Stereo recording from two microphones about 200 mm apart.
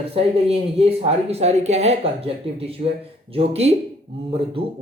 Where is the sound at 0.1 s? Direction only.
30° right (ahead or behind).